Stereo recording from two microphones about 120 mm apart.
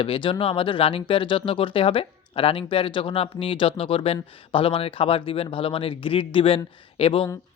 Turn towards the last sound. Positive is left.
turn(degrees=55)  # may be behind; listen again after turning